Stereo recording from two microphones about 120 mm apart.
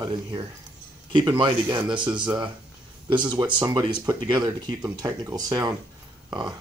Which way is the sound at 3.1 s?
40° right (ahead or behind).